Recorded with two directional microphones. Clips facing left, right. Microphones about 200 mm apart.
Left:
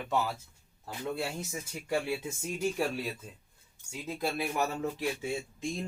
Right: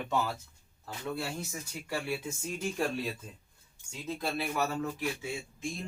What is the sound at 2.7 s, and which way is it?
Speech, 5° left (ahead or behind).